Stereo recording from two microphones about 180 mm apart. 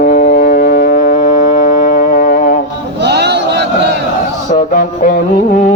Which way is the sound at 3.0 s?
70° right (ahead or behind).